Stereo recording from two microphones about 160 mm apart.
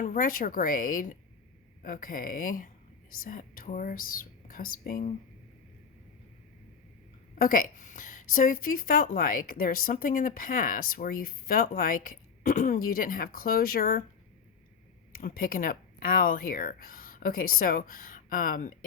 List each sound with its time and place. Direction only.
0.0 s a woman's voice: 55° left (ahead or behind)
7.3 s a woman's voice: 60° left (ahead or behind)
15.1 s speech: 65° left (ahead or behind)